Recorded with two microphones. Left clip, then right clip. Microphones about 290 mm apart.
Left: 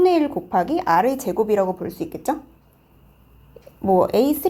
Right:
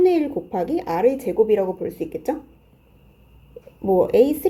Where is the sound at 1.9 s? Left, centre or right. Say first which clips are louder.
Right 1 dB; centre.